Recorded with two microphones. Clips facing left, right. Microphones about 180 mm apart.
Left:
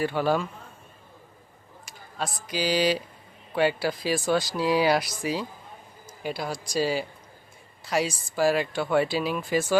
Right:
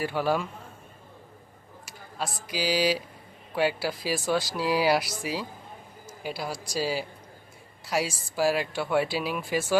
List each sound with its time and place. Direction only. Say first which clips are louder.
0.0 s speech: left 2 dB; 5° right (ahead or behind)
1.8 s speech: left 1 dB; 5° right (ahead or behind)